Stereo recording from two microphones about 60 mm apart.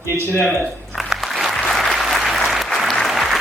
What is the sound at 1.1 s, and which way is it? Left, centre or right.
Applause, centre.